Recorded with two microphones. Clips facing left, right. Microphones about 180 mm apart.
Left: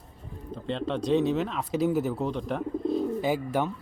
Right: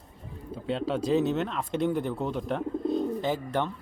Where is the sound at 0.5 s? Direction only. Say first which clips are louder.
Right 1 dB; 5° right (ahead or behind).